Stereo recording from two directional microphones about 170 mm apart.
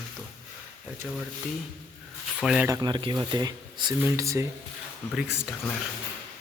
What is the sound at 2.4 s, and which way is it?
Speech, 5° right (ahead or behind).